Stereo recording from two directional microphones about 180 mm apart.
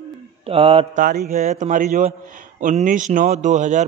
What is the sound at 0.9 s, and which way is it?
A man's voice, 50° right (ahead or behind).